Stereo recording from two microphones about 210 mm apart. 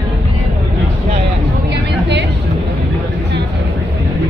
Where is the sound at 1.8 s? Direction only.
55° right (ahead or behind).